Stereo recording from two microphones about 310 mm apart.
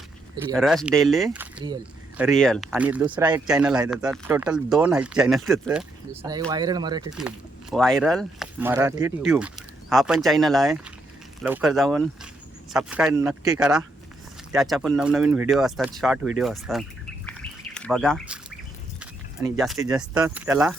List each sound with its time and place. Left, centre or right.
0.5 s speech: centre
2.2 s speech: centre
6.5 s speech: centre
7.1 s speech: centre
17.2 s bird: centre
18.9 s livestock: centre
20.1 s speech: centre